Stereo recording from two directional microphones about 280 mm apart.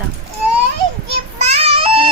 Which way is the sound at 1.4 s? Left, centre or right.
Right.